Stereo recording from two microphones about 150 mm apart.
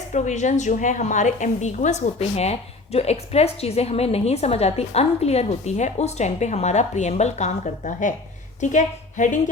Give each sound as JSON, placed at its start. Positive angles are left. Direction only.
{"t": 0.1, "sound": "a woman's voice", "side_deg": 50}